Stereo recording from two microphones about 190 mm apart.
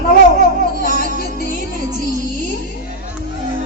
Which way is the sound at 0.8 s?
50° left (ahead or behind).